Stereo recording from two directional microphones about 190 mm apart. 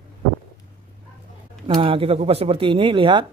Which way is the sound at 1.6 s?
25° right (ahead or behind).